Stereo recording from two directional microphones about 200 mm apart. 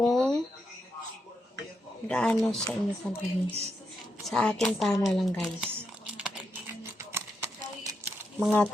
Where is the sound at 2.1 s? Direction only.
5° left (ahead or behind).